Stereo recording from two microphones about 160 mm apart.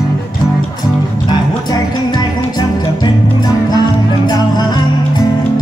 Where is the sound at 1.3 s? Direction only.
25° left (ahead or behind).